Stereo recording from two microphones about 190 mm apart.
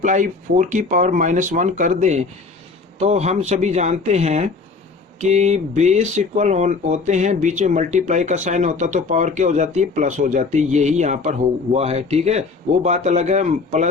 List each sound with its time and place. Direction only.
0.0 s speech: 40° right (ahead or behind)